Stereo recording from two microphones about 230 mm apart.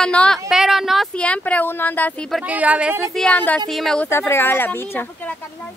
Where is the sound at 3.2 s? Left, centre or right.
Centre.